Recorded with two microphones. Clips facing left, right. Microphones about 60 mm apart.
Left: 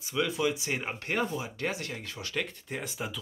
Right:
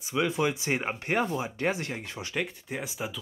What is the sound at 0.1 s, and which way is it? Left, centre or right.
Speech, right.